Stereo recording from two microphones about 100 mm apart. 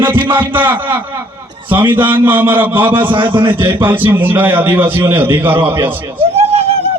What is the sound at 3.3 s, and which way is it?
Speech, 55° right (ahead or behind).